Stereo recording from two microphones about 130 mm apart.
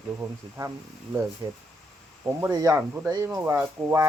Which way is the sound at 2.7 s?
15° right (ahead or behind).